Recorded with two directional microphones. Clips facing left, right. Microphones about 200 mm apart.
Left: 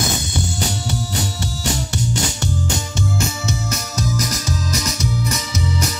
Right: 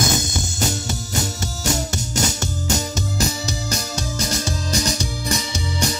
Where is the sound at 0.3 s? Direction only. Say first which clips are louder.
Left 1 dB; 45° right (ahead or behind).